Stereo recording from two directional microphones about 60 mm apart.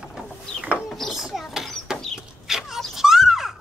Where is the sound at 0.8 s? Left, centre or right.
Centre.